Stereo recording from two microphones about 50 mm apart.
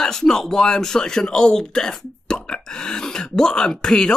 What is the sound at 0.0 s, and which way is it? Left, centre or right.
Speech, centre.